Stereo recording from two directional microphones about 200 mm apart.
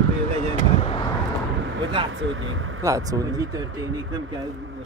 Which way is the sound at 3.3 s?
70° right (ahead or behind).